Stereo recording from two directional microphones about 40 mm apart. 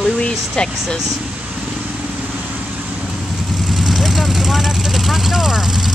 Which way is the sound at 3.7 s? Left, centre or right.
Centre.